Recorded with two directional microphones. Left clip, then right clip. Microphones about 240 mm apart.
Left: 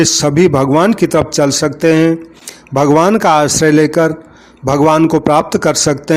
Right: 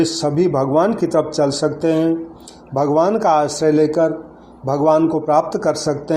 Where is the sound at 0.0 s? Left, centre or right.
Left.